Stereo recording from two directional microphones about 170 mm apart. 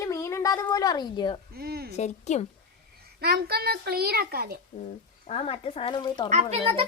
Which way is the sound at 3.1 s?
65° right (ahead or behind).